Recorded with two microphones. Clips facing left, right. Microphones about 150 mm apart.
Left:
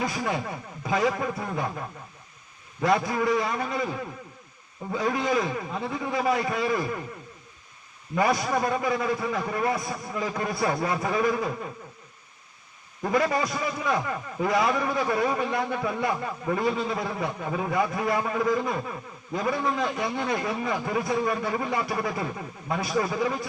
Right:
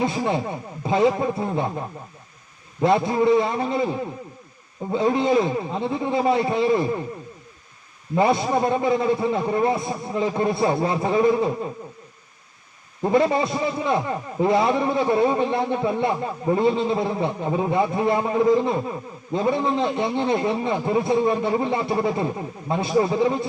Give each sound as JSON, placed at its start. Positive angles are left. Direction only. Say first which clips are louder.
{"t": 0.0, "sound": "a man's voice", "louder": "right 6 dB", "side_deg": -25}
{"t": 8.1, "sound": "a man's voice", "louder": "right 5 dB", "side_deg": -25}
{"t": 13.0, "sound": "a man's voice", "louder": "right 5 dB", "side_deg": -25}